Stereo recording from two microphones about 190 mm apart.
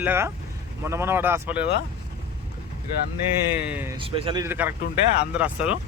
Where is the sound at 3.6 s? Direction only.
10° right (ahead or behind).